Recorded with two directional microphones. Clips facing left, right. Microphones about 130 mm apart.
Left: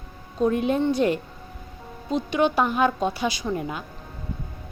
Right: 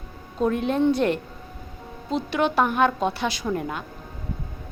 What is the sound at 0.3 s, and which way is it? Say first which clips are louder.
Speech: left 1 dB; 5° left (ahead or behind).